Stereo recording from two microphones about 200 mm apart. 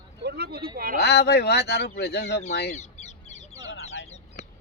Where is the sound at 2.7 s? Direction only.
35° left (ahead or behind).